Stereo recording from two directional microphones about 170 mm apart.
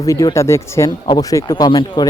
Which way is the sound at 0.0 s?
20° left (ahead or behind).